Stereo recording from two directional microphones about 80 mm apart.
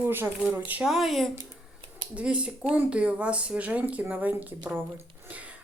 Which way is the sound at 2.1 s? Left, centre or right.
Centre.